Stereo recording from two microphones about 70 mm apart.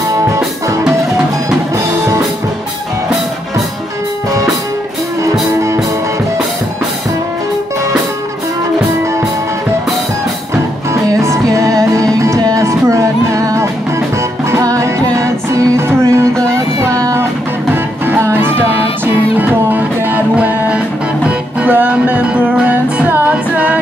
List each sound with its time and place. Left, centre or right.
0.1 s music: right
0.8 s music: centre
11.1 s music: right
18.3 s music: right